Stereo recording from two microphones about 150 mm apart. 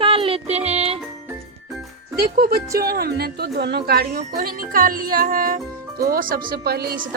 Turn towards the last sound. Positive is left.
turn(degrees=-90)